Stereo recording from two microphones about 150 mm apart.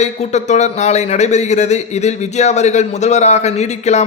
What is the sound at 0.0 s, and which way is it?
Speech, 50° left (ahead or behind).